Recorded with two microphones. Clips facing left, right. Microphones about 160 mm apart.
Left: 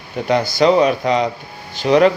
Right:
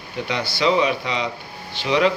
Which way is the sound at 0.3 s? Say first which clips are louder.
Left 7 dB; 45° left (ahead or behind).